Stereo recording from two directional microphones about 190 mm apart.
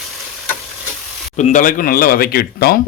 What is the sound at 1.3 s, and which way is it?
Speech, 40° left (ahead or behind).